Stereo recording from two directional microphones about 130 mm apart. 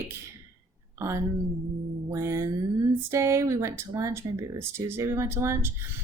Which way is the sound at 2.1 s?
20° right (ahead or behind).